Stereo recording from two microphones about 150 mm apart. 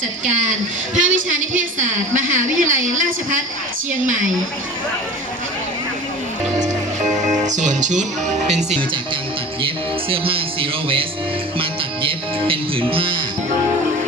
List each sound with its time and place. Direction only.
0.3 s a woman's voice: 55° right (ahead or behind)
7.4 s speech: 55° right (ahead or behind)
9.6 s music: 35° right (ahead or behind)